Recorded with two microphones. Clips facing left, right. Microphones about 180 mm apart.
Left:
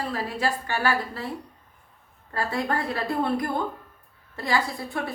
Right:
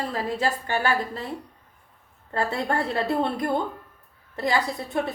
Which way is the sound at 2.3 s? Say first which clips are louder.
Right 1 dB; 25° right (ahead or behind).